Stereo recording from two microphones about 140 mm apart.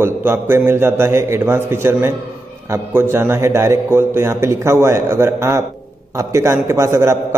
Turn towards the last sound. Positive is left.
turn(degrees=-20)  # may be behind; listen again after turning